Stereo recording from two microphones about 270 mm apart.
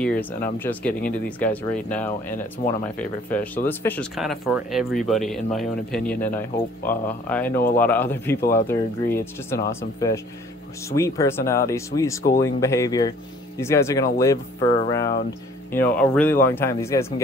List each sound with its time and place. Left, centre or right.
0.0 s speech: centre